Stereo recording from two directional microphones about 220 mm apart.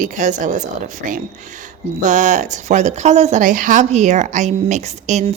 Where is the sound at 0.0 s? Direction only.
35° right (ahead or behind).